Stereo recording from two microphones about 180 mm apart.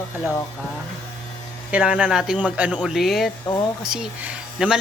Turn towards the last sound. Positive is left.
turn(degrees=-5)  # may be behind; listen again after turning